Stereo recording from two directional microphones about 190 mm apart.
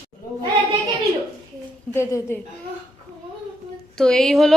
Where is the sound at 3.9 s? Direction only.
5° left (ahead or behind).